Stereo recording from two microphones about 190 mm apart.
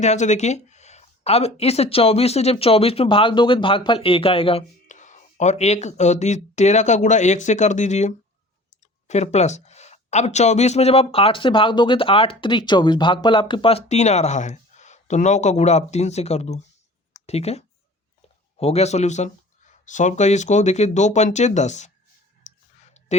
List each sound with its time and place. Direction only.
0.0 s speech: 35° left (ahead or behind)
22.4 s clicking: 35° left (ahead or behind)